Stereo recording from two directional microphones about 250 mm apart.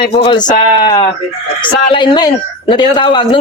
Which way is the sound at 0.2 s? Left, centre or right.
Centre.